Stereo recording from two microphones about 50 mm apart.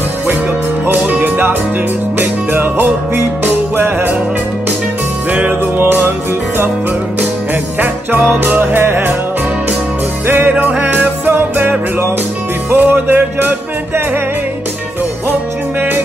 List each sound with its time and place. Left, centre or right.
0.8 s music: right
5.3 s music: right
8.3 s music: right
10.2 s music: right
12.7 s music: right